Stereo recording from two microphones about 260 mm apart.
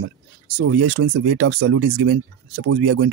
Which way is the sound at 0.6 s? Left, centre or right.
Right.